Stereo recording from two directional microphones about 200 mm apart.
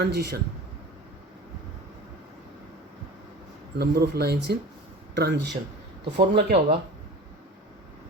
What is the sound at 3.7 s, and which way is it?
Speech, 55° right (ahead or behind).